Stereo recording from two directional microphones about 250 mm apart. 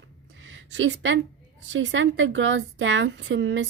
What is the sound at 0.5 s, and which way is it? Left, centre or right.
A woman's voice, right.